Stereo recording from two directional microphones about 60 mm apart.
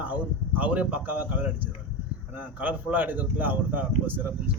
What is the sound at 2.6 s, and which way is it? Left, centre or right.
Speech, right.